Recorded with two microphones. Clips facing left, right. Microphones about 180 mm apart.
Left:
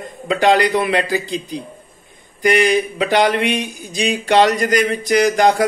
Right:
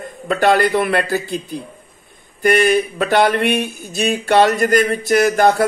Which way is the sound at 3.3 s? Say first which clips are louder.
Right 2 dB; 45° right (ahead or behind).